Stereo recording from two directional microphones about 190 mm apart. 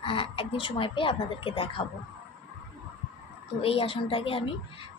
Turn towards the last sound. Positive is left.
turn(degrees=30)  # may be behind; listen again after turning